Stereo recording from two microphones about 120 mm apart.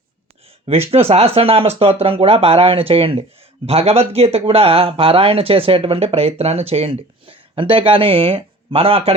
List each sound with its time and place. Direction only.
0.9 s speech: 55° right (ahead or behind)